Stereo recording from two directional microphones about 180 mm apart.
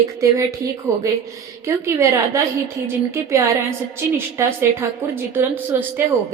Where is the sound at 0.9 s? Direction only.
15° right (ahead or behind).